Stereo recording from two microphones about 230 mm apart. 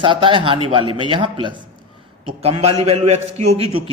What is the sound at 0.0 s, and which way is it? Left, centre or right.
Speech, right.